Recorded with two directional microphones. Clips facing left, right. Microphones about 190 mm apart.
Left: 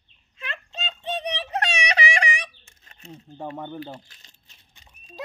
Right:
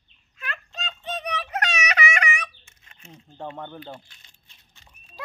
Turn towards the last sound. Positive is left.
turn(degrees=15)  # may be behind; listen again after turning